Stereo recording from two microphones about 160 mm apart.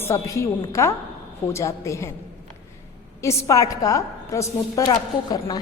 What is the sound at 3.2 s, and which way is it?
A woman's voice, 20° left (ahead or behind).